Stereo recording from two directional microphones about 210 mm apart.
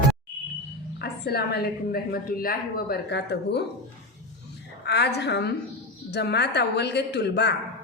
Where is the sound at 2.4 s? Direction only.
45° left (ahead or behind).